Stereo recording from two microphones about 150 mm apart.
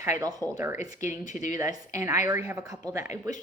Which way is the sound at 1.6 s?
20° right (ahead or behind).